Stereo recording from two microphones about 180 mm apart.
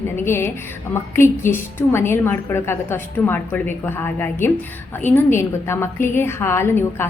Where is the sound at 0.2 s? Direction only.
15° left (ahead or behind).